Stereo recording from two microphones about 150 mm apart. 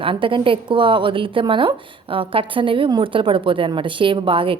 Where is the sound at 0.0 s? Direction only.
35° right (ahead or behind).